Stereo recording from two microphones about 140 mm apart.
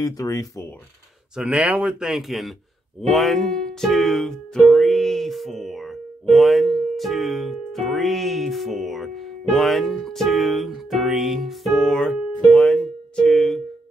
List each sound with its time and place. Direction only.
0.0 s speech: 25° left (ahead or behind)
1.3 s speech: 5° right (ahead or behind)